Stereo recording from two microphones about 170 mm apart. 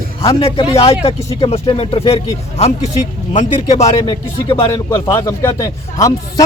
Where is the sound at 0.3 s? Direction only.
30° left (ahead or behind).